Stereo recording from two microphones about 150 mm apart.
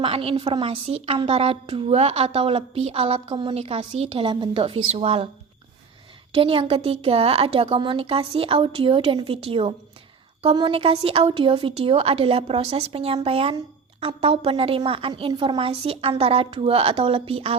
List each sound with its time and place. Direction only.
0.0 s a woman's voice: 40° right (ahead or behind)
6.3 s a woman's voice: 35° right (ahead or behind)